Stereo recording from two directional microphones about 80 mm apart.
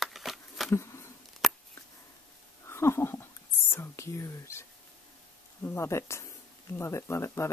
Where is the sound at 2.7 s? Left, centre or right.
Left.